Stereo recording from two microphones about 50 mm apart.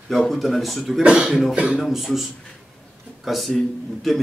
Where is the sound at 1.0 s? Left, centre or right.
Centre.